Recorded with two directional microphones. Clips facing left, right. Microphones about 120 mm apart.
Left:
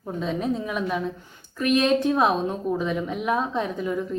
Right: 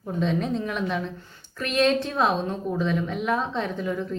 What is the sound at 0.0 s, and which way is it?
A woman's voice, 5° left (ahead or behind).